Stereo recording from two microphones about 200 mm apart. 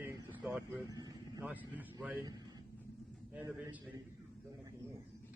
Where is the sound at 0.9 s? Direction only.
20° right (ahead or behind).